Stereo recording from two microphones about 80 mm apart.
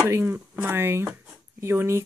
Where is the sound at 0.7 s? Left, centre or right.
Right.